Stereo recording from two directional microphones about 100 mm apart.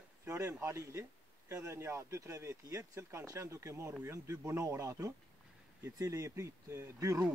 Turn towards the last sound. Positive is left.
turn(degrees=-30)  # may be behind; listen again after turning